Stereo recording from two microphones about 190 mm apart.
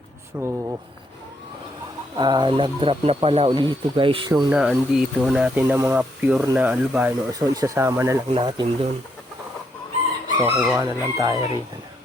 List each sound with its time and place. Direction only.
0.3 s speech: 15° right (ahead or behind)
2.1 s speech: 20° right (ahead or behind)
4.5 s speech: 5° right (ahead or behind)
8.4 s speech: 25° right (ahead or behind)
10.3 s speech: 15° right (ahead or behind)